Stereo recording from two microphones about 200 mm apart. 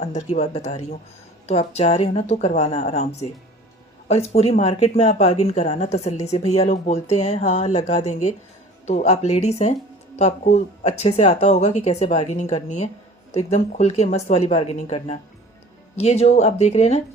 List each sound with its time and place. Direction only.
0.0 s speech: 35° left (ahead or behind)
4.1 s speech: 30° left (ahead or behind)